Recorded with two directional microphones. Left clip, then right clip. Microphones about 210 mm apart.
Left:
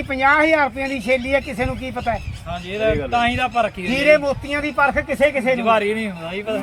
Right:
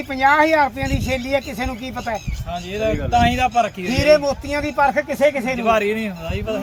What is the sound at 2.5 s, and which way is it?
Speech, 10° right (ahead or behind).